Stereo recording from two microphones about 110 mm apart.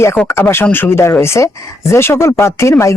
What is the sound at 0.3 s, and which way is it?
Speech, 20° left (ahead or behind).